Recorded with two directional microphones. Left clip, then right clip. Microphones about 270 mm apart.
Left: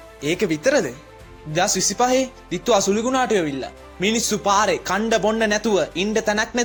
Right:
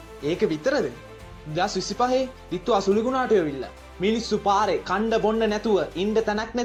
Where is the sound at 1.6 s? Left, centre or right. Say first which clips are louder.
Left 4 dB; left.